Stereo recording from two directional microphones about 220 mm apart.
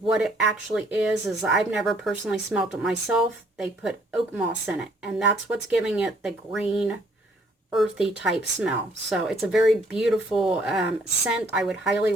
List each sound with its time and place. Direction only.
0.0 s speech: centre (ahead or behind)